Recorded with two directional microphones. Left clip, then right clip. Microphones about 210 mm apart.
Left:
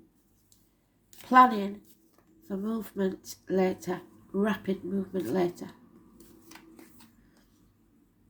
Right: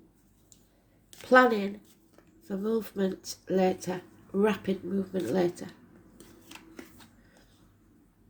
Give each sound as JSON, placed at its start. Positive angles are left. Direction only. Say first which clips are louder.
{"t": 1.3, "sound": "speech", "louder": "left 1 dB", "side_deg": -30}